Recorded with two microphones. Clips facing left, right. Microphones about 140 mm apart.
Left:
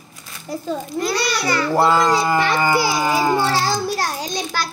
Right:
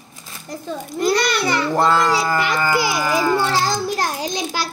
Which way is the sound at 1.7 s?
5° left (ahead or behind).